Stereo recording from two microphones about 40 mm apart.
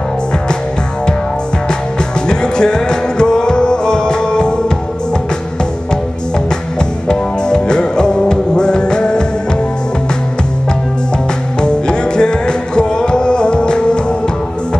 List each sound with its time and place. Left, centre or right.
2.2 s music: left
6.8 s music: left
11.6 s music: left